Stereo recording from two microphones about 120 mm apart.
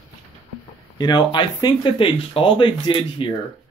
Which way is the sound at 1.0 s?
35° left (ahead or behind).